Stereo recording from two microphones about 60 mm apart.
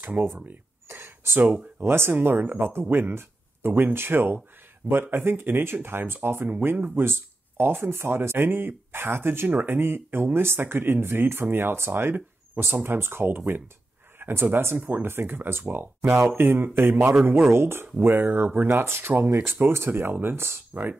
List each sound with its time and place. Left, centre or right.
0.2 s speech: right
0.8 s a sound: right
1.9 s speech: right